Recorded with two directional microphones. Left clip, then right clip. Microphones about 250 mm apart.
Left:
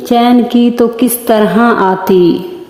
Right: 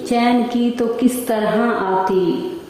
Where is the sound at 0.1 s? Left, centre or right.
Left.